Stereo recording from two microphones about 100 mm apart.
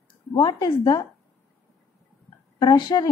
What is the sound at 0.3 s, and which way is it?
Speech, 45° left (ahead or behind).